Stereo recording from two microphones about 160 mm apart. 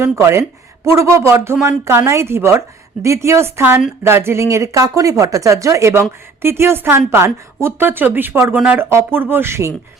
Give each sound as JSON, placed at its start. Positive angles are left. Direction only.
{"t": 0.0, "sound": "speech", "side_deg": -15}